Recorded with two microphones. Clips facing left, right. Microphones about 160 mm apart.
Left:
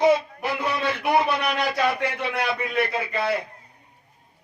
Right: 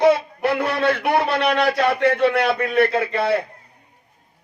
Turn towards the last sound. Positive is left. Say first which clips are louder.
# right 7 dB
turn(degrees=-65)  # may be behind; listen again after turning